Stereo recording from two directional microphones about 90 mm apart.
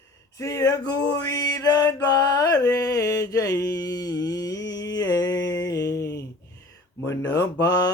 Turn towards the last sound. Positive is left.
turn(degrees=45)  # may be behind; listen again after turning